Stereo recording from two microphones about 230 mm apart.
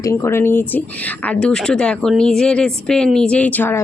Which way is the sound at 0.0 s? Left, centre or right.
Centre.